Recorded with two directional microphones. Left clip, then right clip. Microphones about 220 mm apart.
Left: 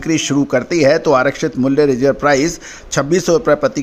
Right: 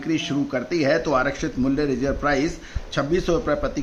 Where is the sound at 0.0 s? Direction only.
45° left (ahead or behind).